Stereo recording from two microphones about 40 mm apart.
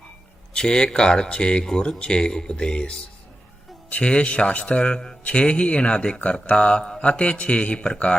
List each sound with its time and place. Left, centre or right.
0.5 s speech: centre
4.0 s a man's voice: left